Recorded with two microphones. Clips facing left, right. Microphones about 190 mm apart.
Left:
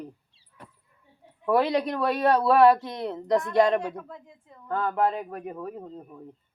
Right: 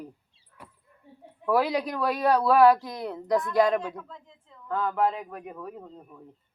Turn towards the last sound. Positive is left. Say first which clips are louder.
# left 4 dB
turn(degrees=5)  # may be behind; listen again after turning